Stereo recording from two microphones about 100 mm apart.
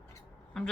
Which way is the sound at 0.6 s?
10° left (ahead or behind).